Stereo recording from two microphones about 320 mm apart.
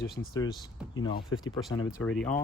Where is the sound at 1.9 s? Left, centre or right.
Centre.